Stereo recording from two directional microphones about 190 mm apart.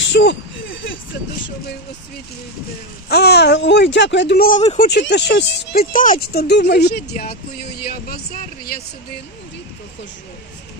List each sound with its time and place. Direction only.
0.1 s a sound: 65° left (ahead or behind)
3.1 s speech: 60° left (ahead or behind); by 4.9 s 40° left (ahead or behind)
4.9 s speech: 60° left (ahead or behind)
5.8 s speech: 45° left (ahead or behind)
7.8 s a sound: 50° left (ahead or behind)
8.3 s speech: 50° left (ahead or behind)